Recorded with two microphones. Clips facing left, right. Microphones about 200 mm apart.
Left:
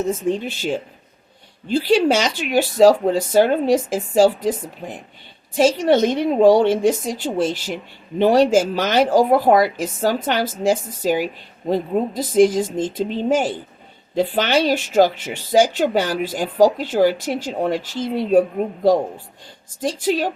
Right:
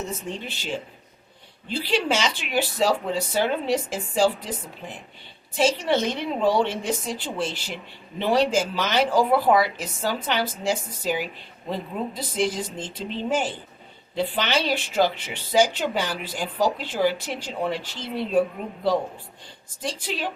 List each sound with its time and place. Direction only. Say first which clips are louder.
0.1 s speech: left 11 dB; 45° left (ahead or behind)
19.8 s speech: left 9 dB; 45° left (ahead or behind)